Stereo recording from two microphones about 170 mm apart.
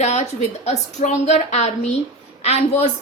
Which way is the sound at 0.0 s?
40° left (ahead or behind).